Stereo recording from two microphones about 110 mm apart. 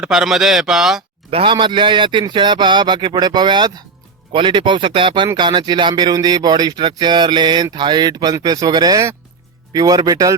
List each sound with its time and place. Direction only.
0.0 s a man's voice: 5° right (ahead or behind)
1.3 s speech: 60° right (ahead or behind)
1.5 s speech: 45° right (ahead or behind)